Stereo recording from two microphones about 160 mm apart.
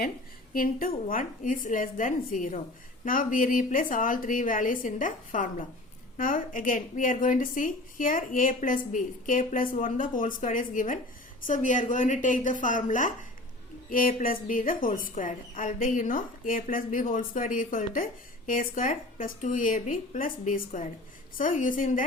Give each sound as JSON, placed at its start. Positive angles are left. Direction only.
{"t": 0.5, "sound": "a woman's voice", "side_deg": 60}